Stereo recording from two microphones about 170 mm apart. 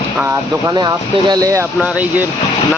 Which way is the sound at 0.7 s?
25° right (ahead or behind).